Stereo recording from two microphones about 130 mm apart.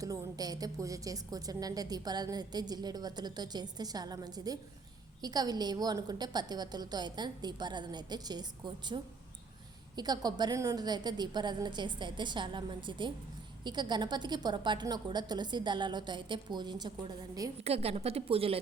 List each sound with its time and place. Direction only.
0.0 s a woman's voice: 30° right (ahead or behind)
17.6 s a woman's voice: 50° right (ahead or behind)